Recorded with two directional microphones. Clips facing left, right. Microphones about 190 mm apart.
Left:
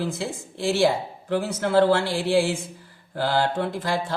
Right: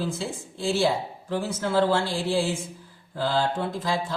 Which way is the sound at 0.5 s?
75° left (ahead or behind).